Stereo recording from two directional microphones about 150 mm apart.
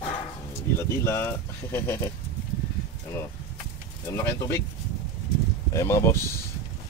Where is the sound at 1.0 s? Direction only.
20° left (ahead or behind).